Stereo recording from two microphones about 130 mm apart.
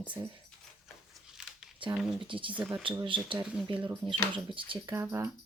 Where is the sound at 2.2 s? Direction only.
40° right (ahead or behind).